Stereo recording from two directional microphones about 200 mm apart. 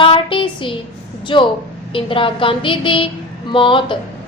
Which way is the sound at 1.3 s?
25° left (ahead or behind).